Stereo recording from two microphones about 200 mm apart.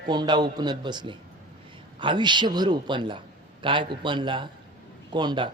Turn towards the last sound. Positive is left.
turn(degrees=-20)  # may be behind; listen again after turning